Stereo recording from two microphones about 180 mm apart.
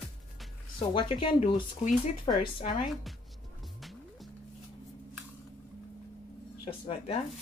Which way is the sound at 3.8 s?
Centre (ahead or behind).